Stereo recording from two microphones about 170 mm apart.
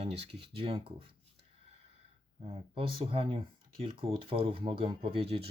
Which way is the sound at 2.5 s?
35° right (ahead or behind).